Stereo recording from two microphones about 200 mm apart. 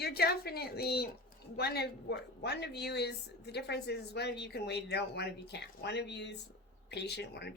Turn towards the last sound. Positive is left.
turn(degrees=55)  # may be behind; listen again after turning